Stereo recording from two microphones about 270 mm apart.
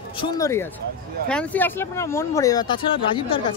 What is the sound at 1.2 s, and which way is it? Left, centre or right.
Speech, centre.